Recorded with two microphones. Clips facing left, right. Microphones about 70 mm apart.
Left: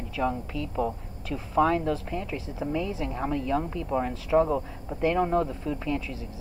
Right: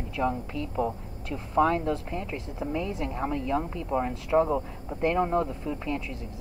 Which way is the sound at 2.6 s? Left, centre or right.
Centre.